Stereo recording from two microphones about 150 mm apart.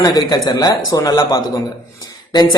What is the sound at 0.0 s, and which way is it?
Speech, 25° left (ahead or behind).